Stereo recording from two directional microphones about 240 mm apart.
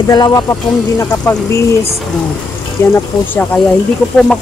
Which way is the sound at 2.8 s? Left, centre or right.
Centre.